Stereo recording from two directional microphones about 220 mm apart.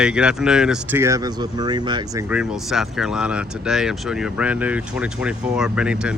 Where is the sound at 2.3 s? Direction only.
5° right (ahead or behind).